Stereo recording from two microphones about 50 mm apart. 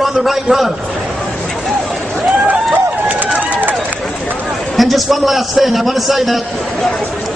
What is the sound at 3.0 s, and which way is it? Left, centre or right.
Run, right.